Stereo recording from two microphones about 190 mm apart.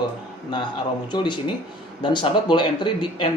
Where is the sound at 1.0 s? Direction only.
25° left (ahead or behind).